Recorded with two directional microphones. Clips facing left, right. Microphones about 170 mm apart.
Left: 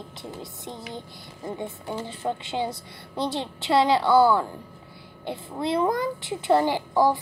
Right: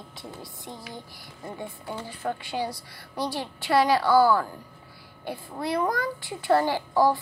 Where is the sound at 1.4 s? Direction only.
20° left (ahead or behind).